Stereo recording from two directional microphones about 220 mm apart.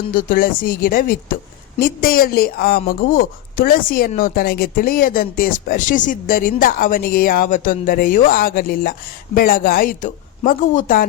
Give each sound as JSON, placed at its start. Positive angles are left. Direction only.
{"t": 0.1, "sound": "speech", "side_deg": 40}